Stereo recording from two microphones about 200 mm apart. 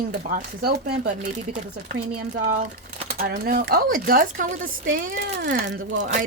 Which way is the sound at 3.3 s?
50° right (ahead or behind).